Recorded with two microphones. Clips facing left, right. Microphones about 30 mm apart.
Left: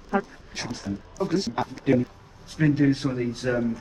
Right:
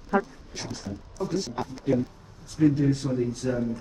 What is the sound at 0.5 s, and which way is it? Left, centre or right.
A man's voice, left.